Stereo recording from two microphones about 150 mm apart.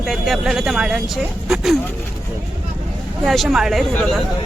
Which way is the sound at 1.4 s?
5° right (ahead or behind).